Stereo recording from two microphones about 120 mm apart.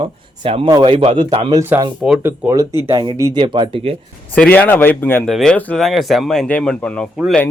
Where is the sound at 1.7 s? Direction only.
15° right (ahead or behind).